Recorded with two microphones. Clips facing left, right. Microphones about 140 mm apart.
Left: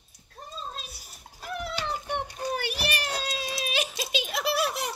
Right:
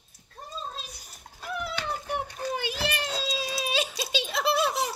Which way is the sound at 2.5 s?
20° right (ahead or behind).